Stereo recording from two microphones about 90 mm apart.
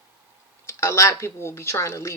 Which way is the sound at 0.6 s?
30° left (ahead or behind).